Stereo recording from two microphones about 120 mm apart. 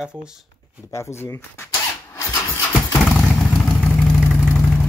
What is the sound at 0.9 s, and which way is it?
Engine starting, 25° left (ahead or behind).